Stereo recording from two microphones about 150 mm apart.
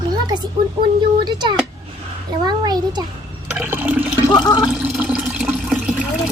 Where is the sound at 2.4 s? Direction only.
30° right (ahead or behind).